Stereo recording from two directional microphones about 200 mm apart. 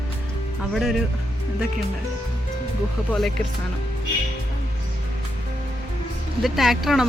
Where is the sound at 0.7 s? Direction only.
Centre (ahead or behind).